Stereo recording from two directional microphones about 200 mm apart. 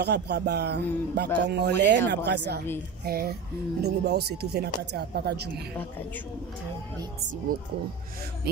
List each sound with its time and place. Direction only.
0.0 s a man's voice: 55° right (ahead or behind)